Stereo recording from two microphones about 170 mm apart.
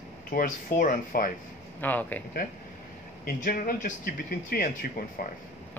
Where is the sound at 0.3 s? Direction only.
55° left (ahead or behind).